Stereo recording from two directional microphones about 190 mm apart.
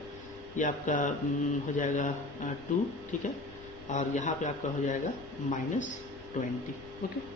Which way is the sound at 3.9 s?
40° left (ahead or behind).